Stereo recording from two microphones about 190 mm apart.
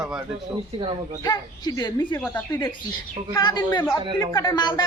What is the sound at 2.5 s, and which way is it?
A man's voice, 20° left (ahead or behind).